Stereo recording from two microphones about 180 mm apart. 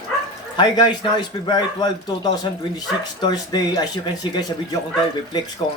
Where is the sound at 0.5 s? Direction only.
25° left (ahead or behind).